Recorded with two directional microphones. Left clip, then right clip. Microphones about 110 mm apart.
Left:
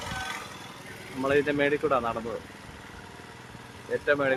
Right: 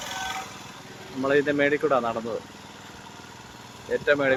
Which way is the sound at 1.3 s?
15° right (ahead or behind).